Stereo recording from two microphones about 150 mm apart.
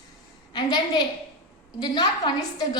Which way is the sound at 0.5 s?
30° left (ahead or behind).